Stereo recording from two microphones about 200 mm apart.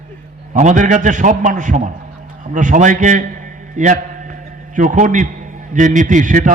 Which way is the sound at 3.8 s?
40° right (ahead or behind).